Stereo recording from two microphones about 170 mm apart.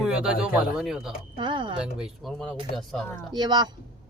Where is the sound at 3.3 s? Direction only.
25° right (ahead or behind).